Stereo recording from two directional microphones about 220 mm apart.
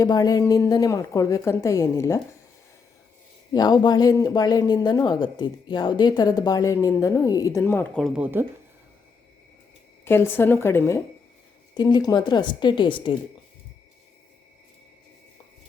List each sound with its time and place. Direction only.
0.0 s a woman's voice: 15° left (ahead or behind)
3.5 s a woman's voice: 20° left (ahead or behind); by 8.4 s 10° right (ahead or behind)
10.0 s a woman's voice: 10° left (ahead or behind)